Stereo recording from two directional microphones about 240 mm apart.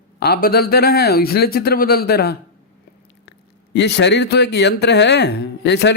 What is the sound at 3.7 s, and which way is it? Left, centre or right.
A man's voice, left.